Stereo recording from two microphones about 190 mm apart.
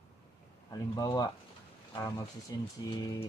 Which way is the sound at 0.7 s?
20° left (ahead or behind).